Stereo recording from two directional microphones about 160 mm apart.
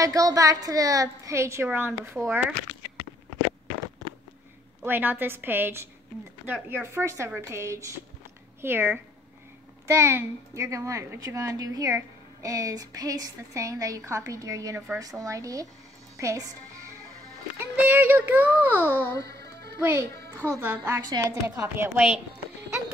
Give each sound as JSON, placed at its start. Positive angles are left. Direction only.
{"t": 0.0, "sound": "a woman's voice", "side_deg": -20}
{"t": 4.8, "sound": "a woman's voice", "side_deg": -10}
{"t": 17.6, "sound": "a woman's voice", "side_deg": -10}
{"t": 19.2, "sound": "music", "side_deg": -90}
{"t": 19.8, "sound": "a woman's voice", "side_deg": -15}